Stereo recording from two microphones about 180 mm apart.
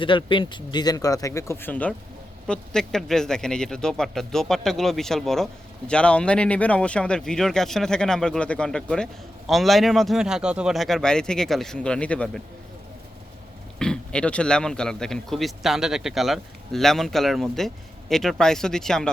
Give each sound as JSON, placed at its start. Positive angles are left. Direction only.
{"t": 0.0, "sound": "a man's voice", "side_deg": 30}
{"t": 13.7, "sound": "a man's voice", "side_deg": 5}